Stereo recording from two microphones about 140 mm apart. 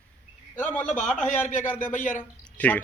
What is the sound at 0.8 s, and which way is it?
Speech, 60° left (ahead or behind).